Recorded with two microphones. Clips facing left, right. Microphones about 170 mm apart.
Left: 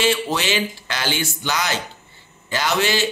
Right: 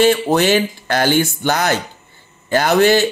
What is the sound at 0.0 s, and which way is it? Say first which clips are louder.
A man's voice: right 8 dB; 55° right (ahead or behind).